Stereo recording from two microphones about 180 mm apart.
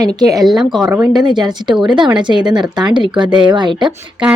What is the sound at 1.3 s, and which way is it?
Speech, 25° right (ahead or behind).